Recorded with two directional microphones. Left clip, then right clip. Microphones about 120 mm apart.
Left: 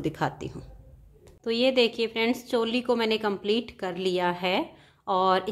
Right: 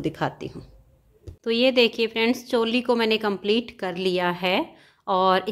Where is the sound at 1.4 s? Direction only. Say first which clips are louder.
Right 4 dB; 20° right (ahead or behind).